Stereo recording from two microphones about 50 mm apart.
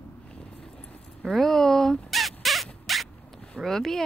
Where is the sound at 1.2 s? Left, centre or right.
Centre.